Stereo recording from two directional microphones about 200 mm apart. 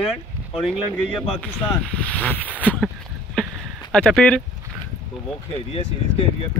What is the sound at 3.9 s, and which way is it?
Speech, 5° left (ahead or behind).